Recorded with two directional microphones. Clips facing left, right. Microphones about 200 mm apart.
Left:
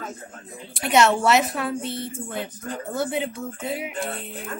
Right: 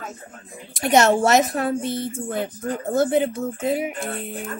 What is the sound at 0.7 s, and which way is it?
A woman's voice, 40° right (ahead or behind).